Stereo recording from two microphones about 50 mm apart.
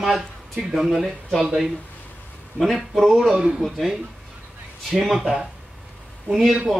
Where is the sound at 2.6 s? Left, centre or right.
Centre.